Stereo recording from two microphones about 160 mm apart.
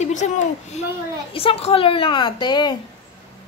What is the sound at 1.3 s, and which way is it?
A woman's voice, 35° left (ahead or behind).